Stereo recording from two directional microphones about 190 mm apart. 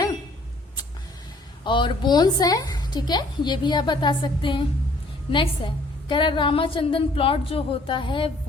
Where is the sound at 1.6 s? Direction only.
25° left (ahead or behind).